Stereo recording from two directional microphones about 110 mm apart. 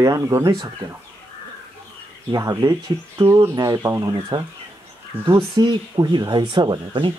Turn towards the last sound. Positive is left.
turn(degrees=-45)  # may be behind; listen again after turning